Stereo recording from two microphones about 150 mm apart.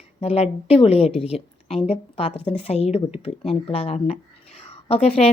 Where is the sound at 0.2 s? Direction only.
45° left (ahead or behind).